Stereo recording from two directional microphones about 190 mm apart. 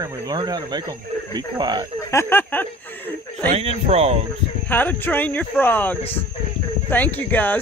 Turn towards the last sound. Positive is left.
turn(degrees=10)  # may be behind; listen again after turning